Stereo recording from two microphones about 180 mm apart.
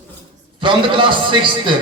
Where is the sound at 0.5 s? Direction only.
25° right (ahead or behind).